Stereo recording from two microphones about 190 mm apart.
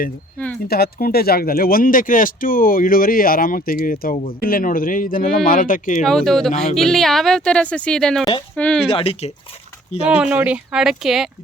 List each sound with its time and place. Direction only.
0.7 s speech: 55° left (ahead or behind)
6.0 s speech: centre (ahead or behind)
8.9 s speech: 30° left (ahead or behind)
10.1 s speech: 5° right (ahead or behind)